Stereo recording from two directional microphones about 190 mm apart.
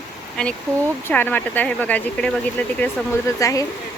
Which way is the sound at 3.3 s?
20° left (ahead or behind).